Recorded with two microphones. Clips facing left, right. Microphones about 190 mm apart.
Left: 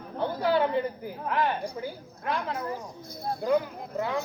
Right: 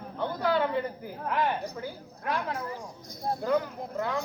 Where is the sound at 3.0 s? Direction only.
10° left (ahead or behind).